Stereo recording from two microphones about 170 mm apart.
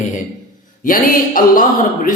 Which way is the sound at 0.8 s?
55° left (ahead or behind).